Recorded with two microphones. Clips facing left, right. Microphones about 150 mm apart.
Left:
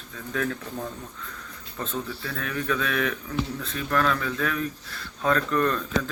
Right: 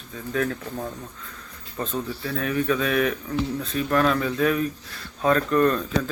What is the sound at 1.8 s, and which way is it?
A man's voice, 15° right (ahead or behind).